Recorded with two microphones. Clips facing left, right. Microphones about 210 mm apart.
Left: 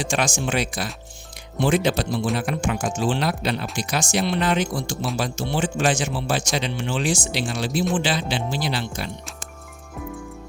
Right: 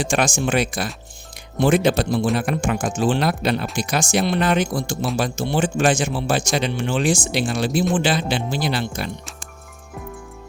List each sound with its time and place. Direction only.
0.0 s speech: 50° right (ahead or behind)